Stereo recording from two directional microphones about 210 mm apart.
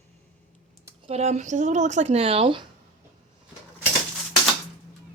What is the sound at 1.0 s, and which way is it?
Speech, 30° right (ahead or behind).